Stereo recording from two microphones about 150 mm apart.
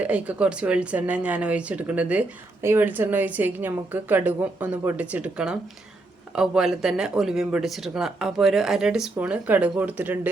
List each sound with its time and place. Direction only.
0.0 s speech: 10° right (ahead or behind)